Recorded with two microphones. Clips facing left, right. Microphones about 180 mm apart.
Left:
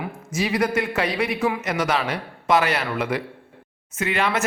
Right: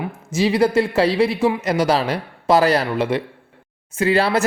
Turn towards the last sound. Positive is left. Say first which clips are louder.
# right 6 dB
turn(degrees=-35)  # may be behind; listen again after turning